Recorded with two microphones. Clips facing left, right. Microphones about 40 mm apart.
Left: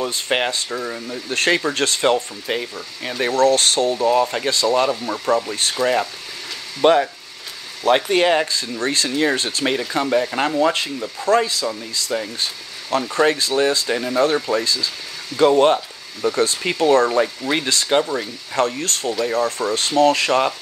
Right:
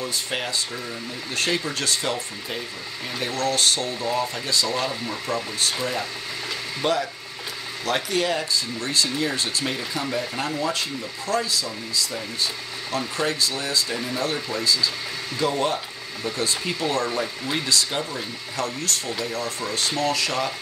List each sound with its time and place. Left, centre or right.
0.0 s speech: left